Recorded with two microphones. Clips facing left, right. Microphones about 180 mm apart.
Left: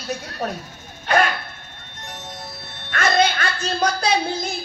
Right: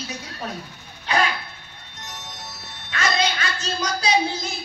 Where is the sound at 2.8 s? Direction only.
55° left (ahead or behind).